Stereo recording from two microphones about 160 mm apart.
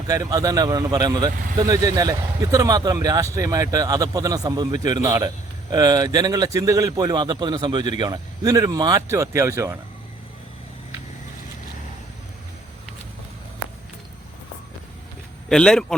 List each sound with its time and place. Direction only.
0.1 s speech: 25° right (ahead or behind)
15.4 s a man's voice: 5° left (ahead or behind)